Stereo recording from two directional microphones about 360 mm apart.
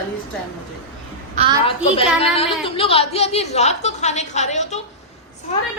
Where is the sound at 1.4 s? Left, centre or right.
Centre.